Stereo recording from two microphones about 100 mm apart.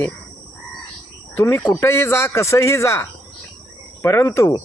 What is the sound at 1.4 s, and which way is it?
Speech, 25° left (ahead or behind).